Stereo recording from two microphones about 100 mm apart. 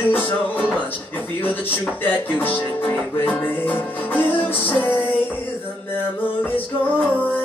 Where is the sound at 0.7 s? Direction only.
20° left (ahead or behind).